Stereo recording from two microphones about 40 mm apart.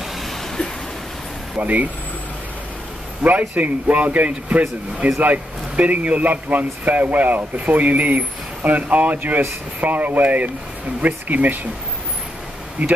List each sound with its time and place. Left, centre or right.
1.6 s a man's voice: right
3.2 s a man's voice: right
12.8 s a man's voice: right